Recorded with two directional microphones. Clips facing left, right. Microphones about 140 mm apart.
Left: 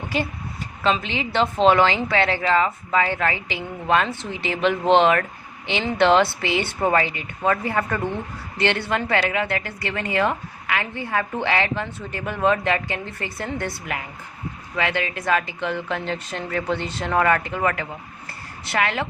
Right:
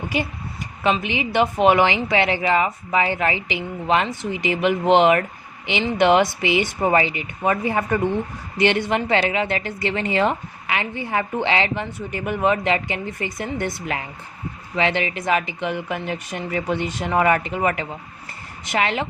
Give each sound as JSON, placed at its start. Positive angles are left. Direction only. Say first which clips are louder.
{"t": 1.0, "sound": "a woman's voice", "louder": "right 2 dB", "side_deg": -15}